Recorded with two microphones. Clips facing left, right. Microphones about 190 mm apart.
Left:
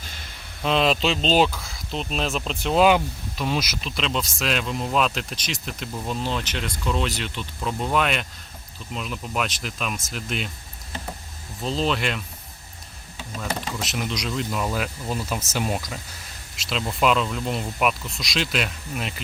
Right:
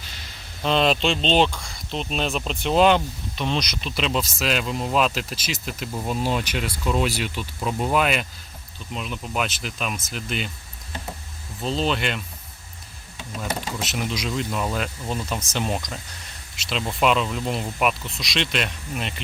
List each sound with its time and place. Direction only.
0.6 s speech: centre (ahead or behind)
11.6 s speech: centre (ahead or behind)
13.3 s speech: 5° right (ahead or behind)